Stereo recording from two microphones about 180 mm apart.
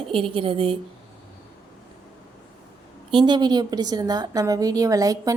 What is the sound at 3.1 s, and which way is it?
Speech, 25° right (ahead or behind).